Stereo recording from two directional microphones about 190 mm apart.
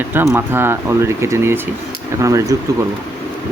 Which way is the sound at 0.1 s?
10° right (ahead or behind).